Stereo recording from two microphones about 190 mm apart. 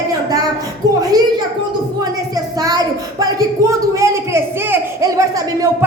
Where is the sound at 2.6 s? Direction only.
20° right (ahead or behind).